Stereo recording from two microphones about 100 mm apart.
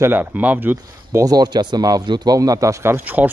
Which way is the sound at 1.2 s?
40° right (ahead or behind).